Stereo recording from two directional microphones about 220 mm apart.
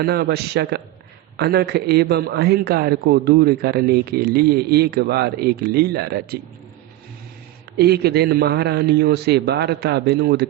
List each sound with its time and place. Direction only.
0.0 s a man's voice: 45° right (ahead or behind)
7.8 s a man's voice: 45° right (ahead or behind)